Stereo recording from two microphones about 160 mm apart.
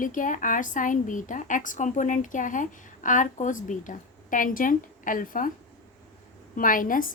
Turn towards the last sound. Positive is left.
turn(degrees=55)  # may be behind; listen again after turning